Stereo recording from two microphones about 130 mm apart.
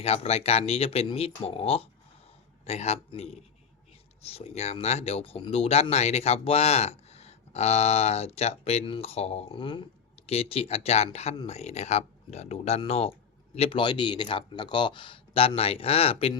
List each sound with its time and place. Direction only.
0.0 s speech: 50° left (ahead or behind)